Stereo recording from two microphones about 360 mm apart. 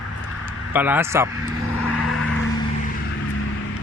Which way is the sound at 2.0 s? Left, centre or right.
Left.